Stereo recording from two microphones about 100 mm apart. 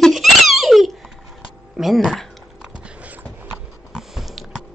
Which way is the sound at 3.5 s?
Centre (ahead or behind).